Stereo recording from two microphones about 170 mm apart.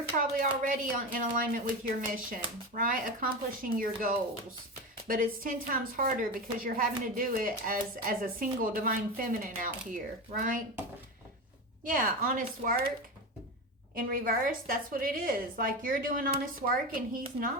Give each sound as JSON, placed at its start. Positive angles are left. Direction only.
{"t": 0.3, "sound": "a woman's voice", "side_deg": -55}
{"t": 11.9, "sound": "a woman's voice", "side_deg": -55}
{"t": 13.9, "sound": "a woman's voice", "side_deg": -55}